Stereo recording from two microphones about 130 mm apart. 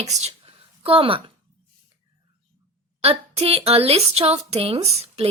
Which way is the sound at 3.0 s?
50° right (ahead or behind).